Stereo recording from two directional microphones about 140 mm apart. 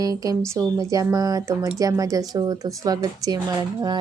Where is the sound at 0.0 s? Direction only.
25° right (ahead or behind).